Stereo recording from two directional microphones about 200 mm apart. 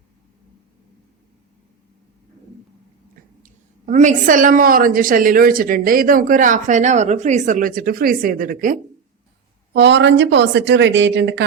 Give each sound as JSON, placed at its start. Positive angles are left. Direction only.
{"t": 3.4, "sound": "a woman's voice", "side_deg": -40}
{"t": 9.7, "sound": "a woman's voice", "side_deg": -60}